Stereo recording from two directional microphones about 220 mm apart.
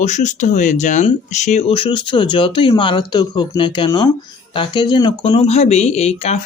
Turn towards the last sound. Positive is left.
turn(degrees=30)  # may be behind; listen again after turning